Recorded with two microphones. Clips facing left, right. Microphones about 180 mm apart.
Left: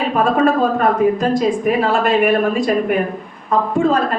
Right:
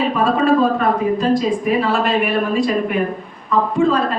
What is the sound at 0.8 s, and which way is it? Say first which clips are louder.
Speech: left 2 dB; 45° left (ahead or behind).